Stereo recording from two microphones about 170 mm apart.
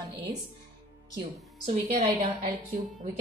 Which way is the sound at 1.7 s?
50° right (ahead or behind).